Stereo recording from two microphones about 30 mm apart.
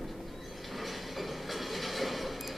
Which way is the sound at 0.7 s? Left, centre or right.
Centre.